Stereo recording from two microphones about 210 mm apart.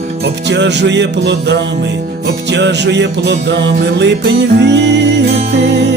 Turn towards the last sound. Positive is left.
turn(degrees=-55)  # may be behind; listen again after turning